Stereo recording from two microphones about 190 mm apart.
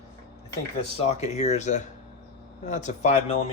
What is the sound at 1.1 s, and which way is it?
Speech, 35° left (ahead or behind).